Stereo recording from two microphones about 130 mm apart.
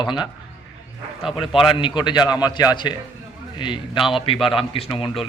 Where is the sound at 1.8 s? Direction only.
35° left (ahead or behind).